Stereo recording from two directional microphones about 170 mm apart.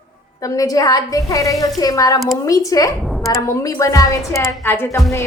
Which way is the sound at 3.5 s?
20° left (ahead or behind).